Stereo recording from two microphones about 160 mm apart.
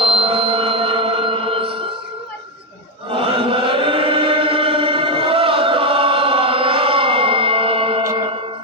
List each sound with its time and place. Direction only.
0.0 s music: 35° right (ahead or behind)
3.1 s chant: 35° right (ahead or behind)